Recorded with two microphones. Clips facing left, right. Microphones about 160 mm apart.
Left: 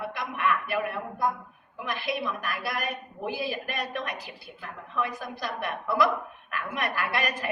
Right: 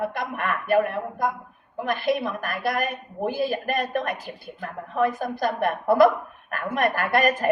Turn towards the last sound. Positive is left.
turn(degrees=-50)  # may be behind; listen again after turning